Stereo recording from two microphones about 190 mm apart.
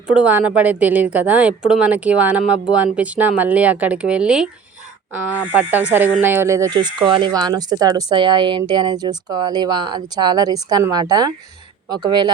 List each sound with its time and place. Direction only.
0.1 s speech: 5° right (ahead or behind)
5.5 s speech: 10° right (ahead or behind)